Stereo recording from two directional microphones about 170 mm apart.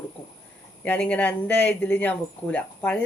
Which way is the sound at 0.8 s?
10° left (ahead or behind).